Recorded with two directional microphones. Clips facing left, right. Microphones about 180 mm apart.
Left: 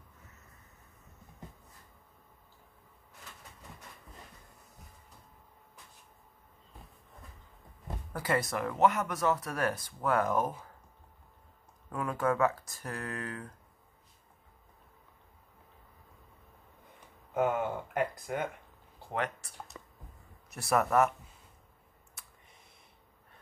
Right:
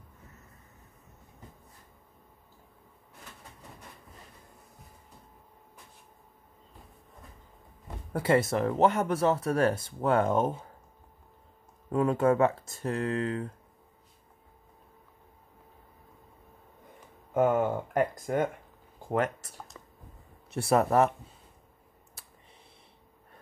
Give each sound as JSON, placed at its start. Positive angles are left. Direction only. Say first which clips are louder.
{"t": 8.1, "sound": "speech", "louder": "right 7 dB", "side_deg": -25}
{"t": 11.9, "sound": "speech", "louder": "right 7 dB", "side_deg": -25}
{"t": 17.3, "sound": "speech", "louder": "right 5 dB", "side_deg": -45}
{"t": 20.4, "sound": "speech", "louder": "right 4 dB", "side_deg": -30}
{"t": 22.2, "sound": "computer keyboard", "louder": "even", "side_deg": -35}